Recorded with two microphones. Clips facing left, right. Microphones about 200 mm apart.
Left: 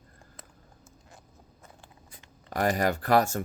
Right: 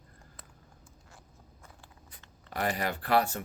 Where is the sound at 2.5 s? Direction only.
45° left (ahead or behind).